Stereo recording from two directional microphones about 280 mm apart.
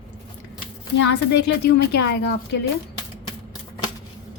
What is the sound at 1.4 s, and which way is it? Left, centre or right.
A woman's voice, left.